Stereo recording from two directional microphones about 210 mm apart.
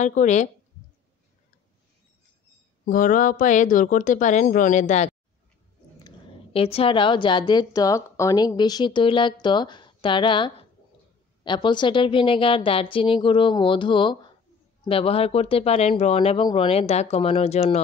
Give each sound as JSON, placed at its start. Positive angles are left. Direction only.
{"t": 0.0, "sound": "speech", "side_deg": 35}
{"t": 2.8, "sound": "a woman's voice", "side_deg": 40}